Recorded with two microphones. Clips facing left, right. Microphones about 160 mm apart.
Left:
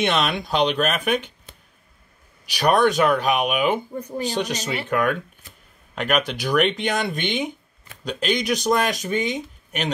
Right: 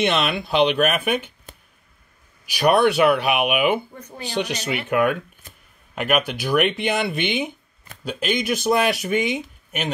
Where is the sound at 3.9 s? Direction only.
35° left (ahead or behind).